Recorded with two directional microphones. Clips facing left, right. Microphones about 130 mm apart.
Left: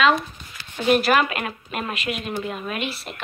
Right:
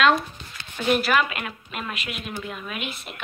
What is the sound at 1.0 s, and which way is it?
A woman's voice, 40° left (ahead or behind).